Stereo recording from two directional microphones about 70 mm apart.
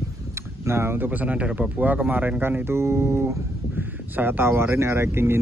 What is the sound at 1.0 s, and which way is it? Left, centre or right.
A man's voice, right.